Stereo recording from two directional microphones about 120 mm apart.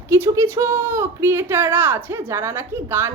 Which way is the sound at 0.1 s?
20° right (ahead or behind).